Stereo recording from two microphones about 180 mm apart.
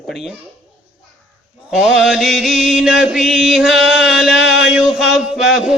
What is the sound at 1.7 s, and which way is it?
Mantra, 5° right (ahead or behind).